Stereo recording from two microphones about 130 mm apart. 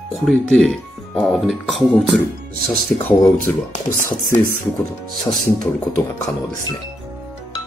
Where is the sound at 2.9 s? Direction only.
15° left (ahead or behind).